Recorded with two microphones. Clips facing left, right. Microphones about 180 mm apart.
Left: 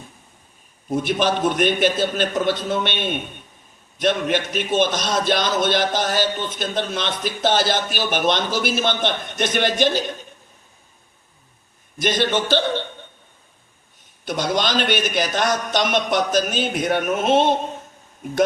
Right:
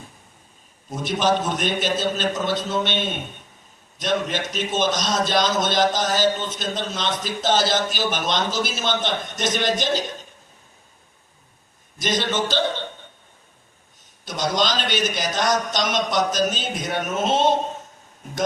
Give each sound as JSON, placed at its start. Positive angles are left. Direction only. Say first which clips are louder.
{"t": 0.9, "sound": "a man's voice", "louder": "left 1 dB", "side_deg": 55}
{"t": 11.9, "sound": "a man's voice", "louder": "left 3 dB", "side_deg": 55}
{"t": 14.3, "sound": "a man's voice", "louder": "left 1 dB", "side_deg": 55}